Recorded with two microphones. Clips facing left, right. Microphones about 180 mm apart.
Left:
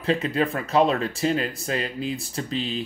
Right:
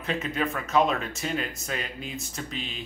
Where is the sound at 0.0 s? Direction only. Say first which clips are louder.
Left 6 dB; 35° left (ahead or behind).